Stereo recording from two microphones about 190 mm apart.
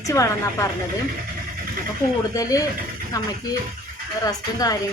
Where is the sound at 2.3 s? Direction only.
20° left (ahead or behind).